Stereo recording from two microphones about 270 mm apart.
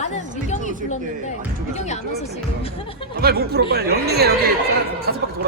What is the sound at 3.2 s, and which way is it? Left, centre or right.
Speech, right.